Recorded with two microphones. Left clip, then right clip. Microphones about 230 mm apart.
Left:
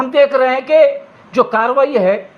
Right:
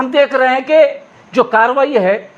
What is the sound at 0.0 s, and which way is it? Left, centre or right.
A man's voice, right.